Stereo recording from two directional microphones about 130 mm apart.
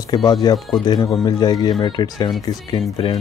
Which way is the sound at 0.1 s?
30° left (ahead or behind).